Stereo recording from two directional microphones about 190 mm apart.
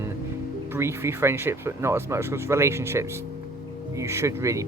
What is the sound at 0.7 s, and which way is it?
Speech, 15° right (ahead or behind).